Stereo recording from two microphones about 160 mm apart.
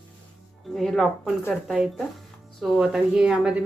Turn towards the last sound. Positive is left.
turn(degrees=-5)  # may be behind; listen again after turning